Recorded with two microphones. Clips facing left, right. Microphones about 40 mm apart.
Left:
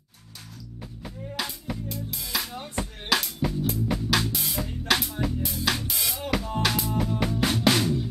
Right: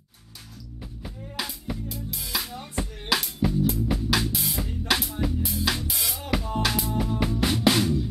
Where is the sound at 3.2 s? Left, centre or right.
Centre.